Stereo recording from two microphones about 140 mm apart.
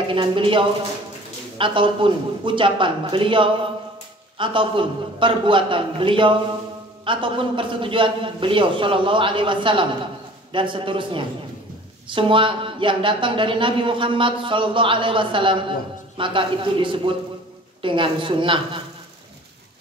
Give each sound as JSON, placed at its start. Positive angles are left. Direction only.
{"t": 0.1, "sound": "a woman's voice", "side_deg": -35}